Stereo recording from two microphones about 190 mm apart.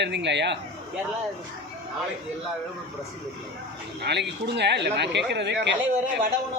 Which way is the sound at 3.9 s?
60° right (ahead or behind).